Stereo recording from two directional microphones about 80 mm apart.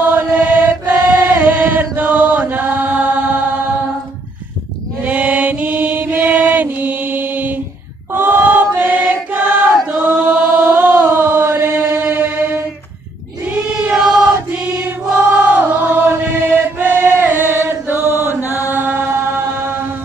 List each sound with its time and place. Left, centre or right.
0.0 s chant: right
5.0 s mantra: centre
8.1 s choir: right
9.8 s chant: right
12.0 s a sound: right
13.8 s choir: centre
14.5 s chant: right